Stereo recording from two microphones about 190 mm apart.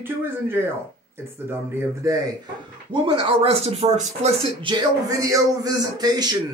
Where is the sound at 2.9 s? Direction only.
30° right (ahead or behind).